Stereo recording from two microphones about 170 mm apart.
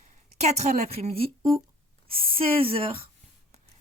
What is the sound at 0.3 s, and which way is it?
Speech, 40° right (ahead or behind).